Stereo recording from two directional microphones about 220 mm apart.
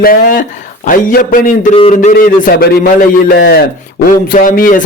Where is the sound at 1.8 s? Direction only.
25° left (ahead or behind).